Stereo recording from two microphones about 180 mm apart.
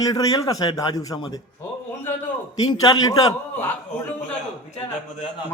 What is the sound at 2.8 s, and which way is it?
Speech, 20° left (ahead or behind).